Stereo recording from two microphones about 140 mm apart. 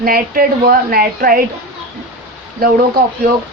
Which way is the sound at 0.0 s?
90° right.